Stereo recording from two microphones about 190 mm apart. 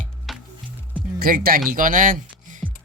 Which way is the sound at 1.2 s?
50° right (ahead or behind).